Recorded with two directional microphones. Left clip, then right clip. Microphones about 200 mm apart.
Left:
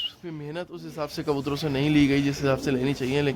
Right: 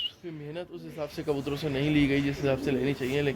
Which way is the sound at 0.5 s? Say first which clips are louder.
Left 5 dB; 40° left (ahead or behind).